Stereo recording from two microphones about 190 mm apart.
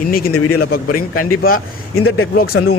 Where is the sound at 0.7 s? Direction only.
50° left (ahead or behind).